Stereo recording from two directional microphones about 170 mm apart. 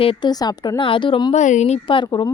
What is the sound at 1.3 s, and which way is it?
Speech, 45° left (ahead or behind).